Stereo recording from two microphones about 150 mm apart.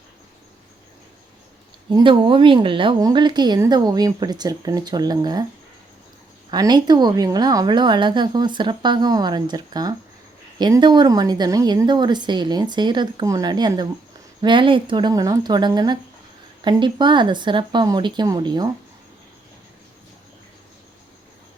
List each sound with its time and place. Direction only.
2.0 s a woman's voice: 35° right (ahead or behind)
6.5 s a woman's voice: 30° right (ahead or behind)